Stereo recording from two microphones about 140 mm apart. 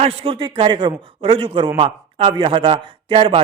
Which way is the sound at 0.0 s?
45° right (ahead or behind).